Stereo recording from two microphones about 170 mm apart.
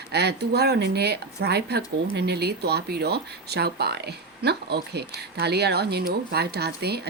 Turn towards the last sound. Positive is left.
turn(degrees=-70)  # may be behind; listen again after turning